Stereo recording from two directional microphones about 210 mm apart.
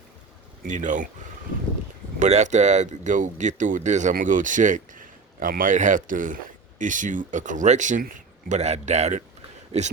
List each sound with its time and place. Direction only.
0.6 s speech: 35° right (ahead or behind)
2.1 s speech: 35° right (ahead or behind)